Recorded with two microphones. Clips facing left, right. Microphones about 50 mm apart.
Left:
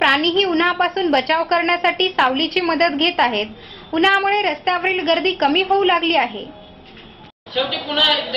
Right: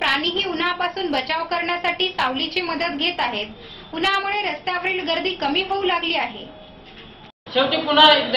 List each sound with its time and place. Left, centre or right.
0.0 s a woman's voice: left
7.5 s a woman's voice: centre